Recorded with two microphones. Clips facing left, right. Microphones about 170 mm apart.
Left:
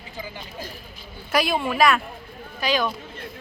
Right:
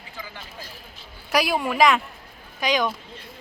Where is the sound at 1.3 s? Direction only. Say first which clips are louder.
Even; 10° right (ahead or behind).